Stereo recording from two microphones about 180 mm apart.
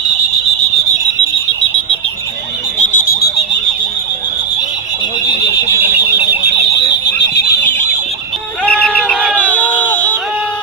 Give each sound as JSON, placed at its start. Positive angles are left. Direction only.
{"t": 2.8, "sound": "alarm", "side_deg": 55}
{"t": 6.7, "sound": "alarm", "side_deg": 70}
{"t": 8.6, "sound": "a sound", "side_deg": 5}